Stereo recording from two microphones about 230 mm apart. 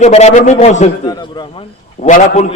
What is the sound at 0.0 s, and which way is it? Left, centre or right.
Speech, left.